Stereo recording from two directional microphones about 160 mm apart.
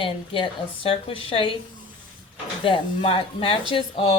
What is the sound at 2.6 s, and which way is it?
Speech, 35° left (ahead or behind).